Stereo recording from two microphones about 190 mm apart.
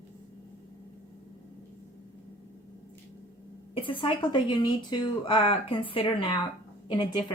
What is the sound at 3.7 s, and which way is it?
Speech, 25° left (ahead or behind).